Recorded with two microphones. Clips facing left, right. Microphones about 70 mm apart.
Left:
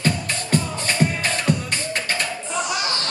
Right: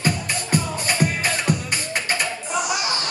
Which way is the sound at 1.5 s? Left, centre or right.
Centre.